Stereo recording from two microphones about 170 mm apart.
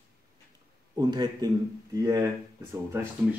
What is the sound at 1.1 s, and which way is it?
Speech, 25° right (ahead or behind).